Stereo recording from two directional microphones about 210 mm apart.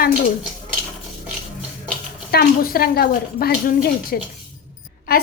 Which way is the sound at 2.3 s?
45° left (ahead or behind).